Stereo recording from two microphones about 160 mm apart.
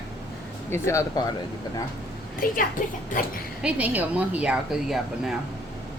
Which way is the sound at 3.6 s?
10° right (ahead or behind).